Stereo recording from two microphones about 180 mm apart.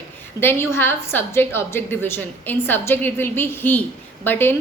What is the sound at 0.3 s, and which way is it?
A woman's voice, 15° left (ahead or behind).